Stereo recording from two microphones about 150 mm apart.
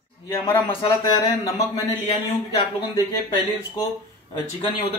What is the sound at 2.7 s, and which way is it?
Speech, 25° left (ahead or behind).